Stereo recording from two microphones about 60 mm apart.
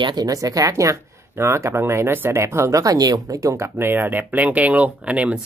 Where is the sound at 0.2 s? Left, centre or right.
Right.